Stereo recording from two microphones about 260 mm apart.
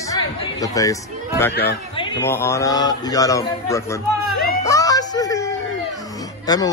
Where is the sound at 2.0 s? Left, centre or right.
Centre.